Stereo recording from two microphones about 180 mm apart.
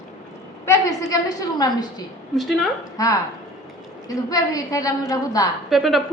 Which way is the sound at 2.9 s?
20° left (ahead or behind).